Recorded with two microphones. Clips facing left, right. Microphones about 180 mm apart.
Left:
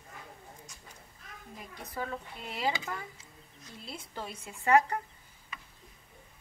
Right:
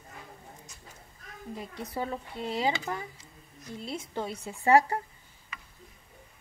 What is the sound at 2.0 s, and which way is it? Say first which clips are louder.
Speech: right 4 dB; 30° right (ahead or behind).